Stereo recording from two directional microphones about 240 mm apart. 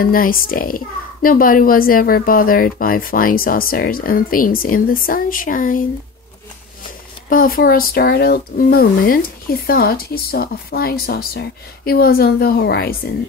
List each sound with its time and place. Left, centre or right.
0.0 s a child's voice: left
7.2 s a child's voice: left